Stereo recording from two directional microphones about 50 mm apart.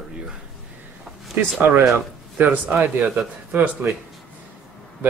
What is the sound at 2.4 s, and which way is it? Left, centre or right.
Speech, right.